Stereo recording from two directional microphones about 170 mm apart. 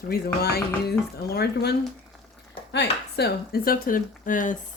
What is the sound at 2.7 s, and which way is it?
Speech, 80° left.